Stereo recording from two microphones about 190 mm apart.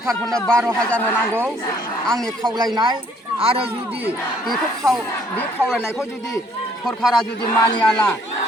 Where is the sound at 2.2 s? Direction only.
20° right (ahead or behind).